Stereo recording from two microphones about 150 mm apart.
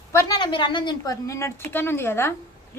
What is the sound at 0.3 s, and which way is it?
A woman's voice, 30° left (ahead or behind).